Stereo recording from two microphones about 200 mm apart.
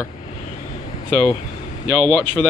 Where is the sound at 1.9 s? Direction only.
5° left (ahead or behind).